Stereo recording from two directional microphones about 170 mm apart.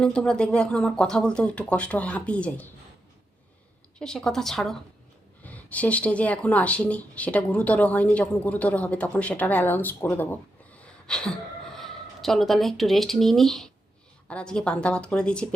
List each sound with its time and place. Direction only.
0.0 s speech: 5° left (ahead or behind)
3.9 s speech: 5° left (ahead or behind)